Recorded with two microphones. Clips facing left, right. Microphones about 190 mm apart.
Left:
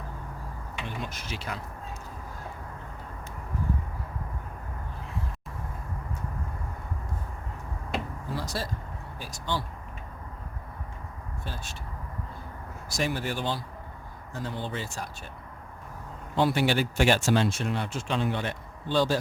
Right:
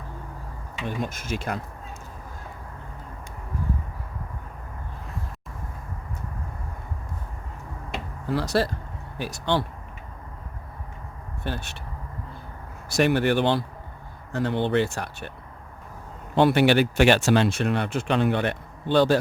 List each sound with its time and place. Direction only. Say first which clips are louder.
0.9 s speech: right 9 dB; 45° right (ahead or behind)
8.3 s speech: right 11 dB; 70° right (ahead or behind)
11.4 s speech: right 9 dB; 65° right (ahead or behind)
12.9 s speech: right 10 dB; 65° right (ahead or behind)
16.3 s speech: right 6 dB; 65° right (ahead or behind)